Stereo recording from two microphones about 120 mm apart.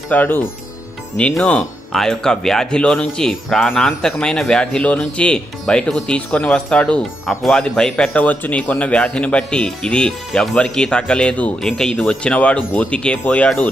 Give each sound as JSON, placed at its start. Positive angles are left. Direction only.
{"t": 0.1, "sound": "speech", "side_deg": 15}
{"t": 1.1, "sound": "speech", "side_deg": 5}